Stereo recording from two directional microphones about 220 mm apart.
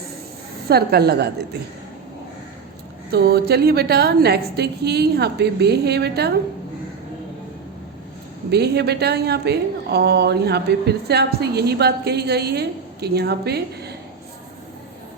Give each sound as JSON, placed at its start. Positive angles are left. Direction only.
{"t": 0.7, "sound": "a woman's voice", "side_deg": -45}
{"t": 3.1, "sound": "a woman's voice", "side_deg": -45}
{"t": 8.4, "sound": "a woman's voice", "side_deg": -50}